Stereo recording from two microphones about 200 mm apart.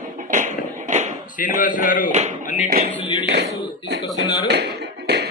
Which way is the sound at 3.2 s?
55° right (ahead or behind).